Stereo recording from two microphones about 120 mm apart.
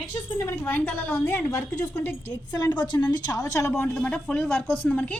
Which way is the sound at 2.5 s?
35° left (ahead or behind).